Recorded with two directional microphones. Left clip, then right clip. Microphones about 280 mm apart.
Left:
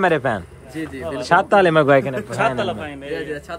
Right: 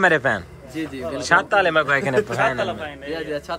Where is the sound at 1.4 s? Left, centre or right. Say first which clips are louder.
Left 4 dB; centre.